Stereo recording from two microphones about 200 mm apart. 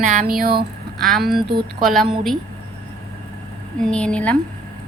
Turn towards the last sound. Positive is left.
turn(degrees=5)  # may be behind; listen again after turning